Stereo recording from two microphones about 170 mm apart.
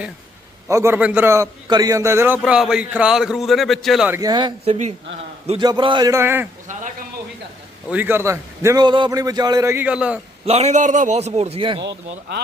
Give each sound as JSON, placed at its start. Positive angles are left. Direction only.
{"t": 0.7, "sound": "a man's voice", "side_deg": -15}
{"t": 4.1, "sound": "a man's voice", "side_deg": -20}
{"t": 7.9, "sound": "a man's voice", "side_deg": -10}
{"t": 10.4, "sound": "a man's voice", "side_deg": -40}
{"t": 11.8, "sound": "speech", "side_deg": -90}